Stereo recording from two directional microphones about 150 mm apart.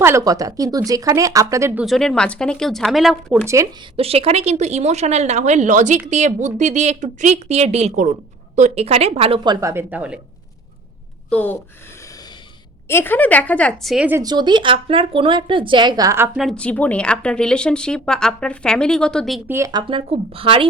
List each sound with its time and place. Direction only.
0.0 s speech: 20° right (ahead or behind)
1.8 s a woman's voice: centre (ahead or behind)
3.4 s speech: 20° right (ahead or behind)
3.9 s speech: 40° right (ahead or behind); by 10.2 s 10° right (ahead or behind)
11.3 s a woman's voice: 10° left (ahead or behind)
12.9 s a woman's voice: 15° left (ahead or behind); by 14.1 s centre (ahead or behind)
14.2 s speech: 30° right (ahead or behind)
16.4 s a woman's voice: 5° left (ahead or behind)
19.5 s speech: 20° right (ahead or behind)
19.9 s speech: 35° right (ahead or behind)